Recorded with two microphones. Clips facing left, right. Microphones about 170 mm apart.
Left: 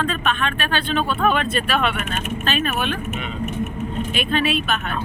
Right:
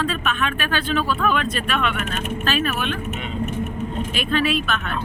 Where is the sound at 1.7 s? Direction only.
35° left (ahead or behind).